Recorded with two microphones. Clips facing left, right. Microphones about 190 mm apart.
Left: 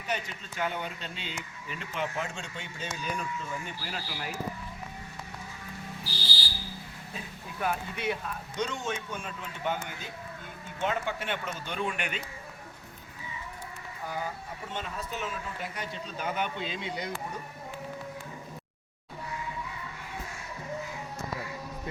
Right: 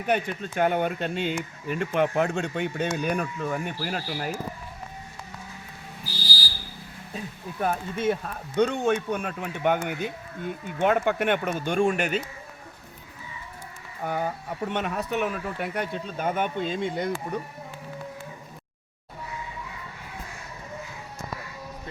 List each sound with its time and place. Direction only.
0.0 s speech: 55° right (ahead or behind)
7.6 s speech: 40° right (ahead or behind)
14.0 s speech: 60° right (ahead or behind)